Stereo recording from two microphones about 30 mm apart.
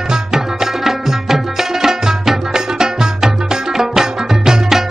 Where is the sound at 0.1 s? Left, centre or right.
Centre.